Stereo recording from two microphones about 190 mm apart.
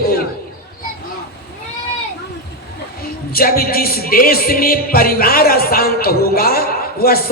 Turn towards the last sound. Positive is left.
turn(degrees=50)  # may be behind; listen again after turning